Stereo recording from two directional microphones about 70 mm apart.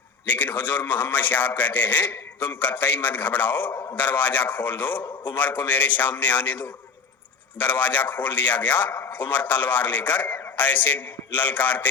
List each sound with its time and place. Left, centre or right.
0.3 s a man's voice: left
7.6 s a man's voice: left